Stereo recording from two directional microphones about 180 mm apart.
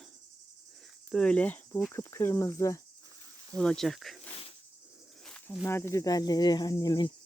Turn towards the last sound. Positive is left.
turn(degrees=25)  # may be behind; listen again after turning